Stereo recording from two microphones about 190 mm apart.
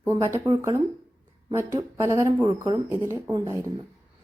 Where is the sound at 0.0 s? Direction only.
15° right (ahead or behind).